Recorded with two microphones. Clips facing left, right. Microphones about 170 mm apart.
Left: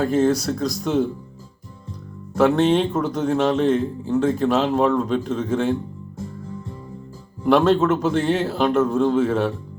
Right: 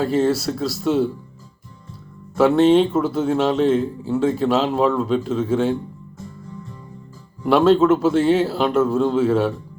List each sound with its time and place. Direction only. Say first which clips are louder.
0.0 s a man's voice: even; 5° right (ahead or behind)
2.3 s a man's voice: right 3 dB; centre (ahead or behind)
7.4 s a man's voice: right 2 dB; 5° right (ahead or behind)